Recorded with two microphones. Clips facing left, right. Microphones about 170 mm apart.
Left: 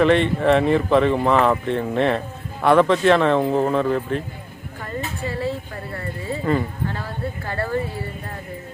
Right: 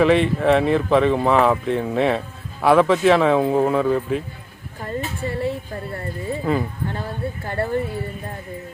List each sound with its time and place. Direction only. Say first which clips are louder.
0.0 s speech: even; centre (ahead or behind)
4.8 s a sound: right 2 dB; 25° right (ahead or behind)
6.4 s speech: left 1 dB; 5° right (ahead or behind)
6.9 s speech: right 1 dB; 25° right (ahead or behind)